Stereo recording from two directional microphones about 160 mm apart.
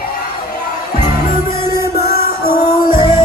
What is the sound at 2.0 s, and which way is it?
Music, 75° left (ahead or behind).